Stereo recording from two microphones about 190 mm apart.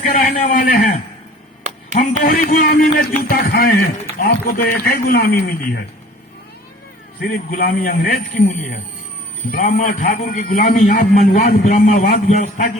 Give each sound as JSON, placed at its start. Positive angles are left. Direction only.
{"t": 0.0, "sound": "a man's voice", "side_deg": 45}
{"t": 2.2, "sound": "a man's voice", "side_deg": 50}
{"t": 7.2, "sound": "a man's voice", "side_deg": 50}